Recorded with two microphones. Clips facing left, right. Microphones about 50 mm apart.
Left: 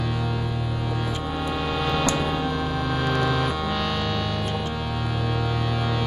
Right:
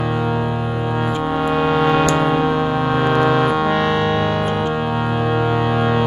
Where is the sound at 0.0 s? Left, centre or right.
Right.